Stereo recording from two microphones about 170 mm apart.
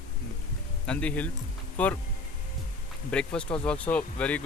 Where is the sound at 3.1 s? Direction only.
5° left (ahead or behind).